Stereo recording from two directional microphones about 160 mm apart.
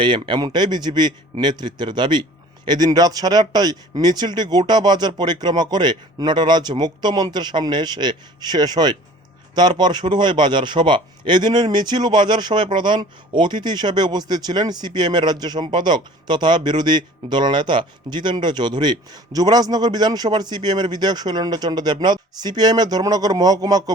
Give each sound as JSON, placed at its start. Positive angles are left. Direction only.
{"t": 0.0, "sound": "a man's voice", "side_deg": -30}